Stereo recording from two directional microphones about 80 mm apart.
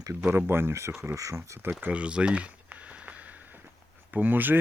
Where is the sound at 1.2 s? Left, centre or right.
Right.